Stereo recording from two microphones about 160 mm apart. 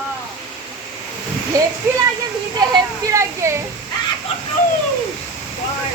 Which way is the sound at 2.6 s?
20° right (ahead or behind).